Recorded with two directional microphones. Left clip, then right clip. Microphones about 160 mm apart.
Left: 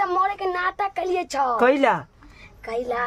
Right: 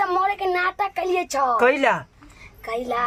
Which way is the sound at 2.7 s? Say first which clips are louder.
Right 1 dB; 15° right (ahead or behind).